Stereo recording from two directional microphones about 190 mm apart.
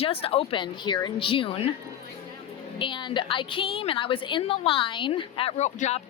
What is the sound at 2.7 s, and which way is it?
A woman's voice, 25° left (ahead or behind).